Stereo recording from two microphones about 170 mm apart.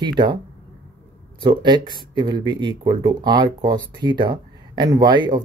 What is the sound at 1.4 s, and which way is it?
Speech, 25° right (ahead or behind).